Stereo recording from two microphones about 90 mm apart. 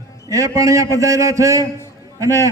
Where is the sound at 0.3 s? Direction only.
35° right (ahead or behind).